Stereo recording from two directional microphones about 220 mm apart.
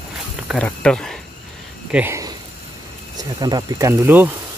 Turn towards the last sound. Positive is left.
turn(degrees=-10)  # may be behind; listen again after turning